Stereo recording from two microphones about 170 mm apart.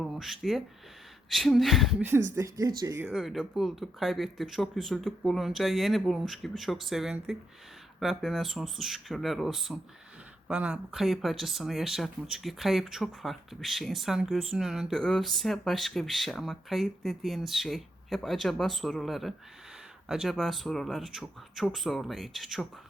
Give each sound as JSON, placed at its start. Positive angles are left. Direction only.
{"t": 0.0, "sound": "speech", "side_deg": 0}
{"t": 2.0, "sound": "speech", "side_deg": -15}
{"t": 3.1, "sound": "speech", "side_deg": 0}